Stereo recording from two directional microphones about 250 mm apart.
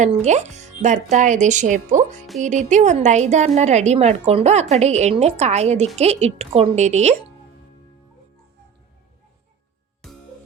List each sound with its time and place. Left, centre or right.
0.0 s a woman's voice: right